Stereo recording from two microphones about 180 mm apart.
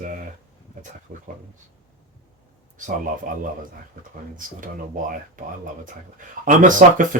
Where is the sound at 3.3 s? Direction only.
50° right (ahead or behind).